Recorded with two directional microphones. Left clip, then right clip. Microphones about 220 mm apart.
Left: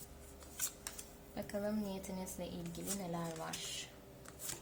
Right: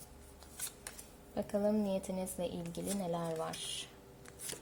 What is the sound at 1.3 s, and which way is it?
A woman's voice, 30° right (ahead or behind).